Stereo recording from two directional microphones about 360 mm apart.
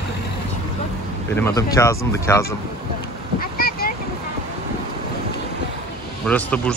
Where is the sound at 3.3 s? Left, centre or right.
Left.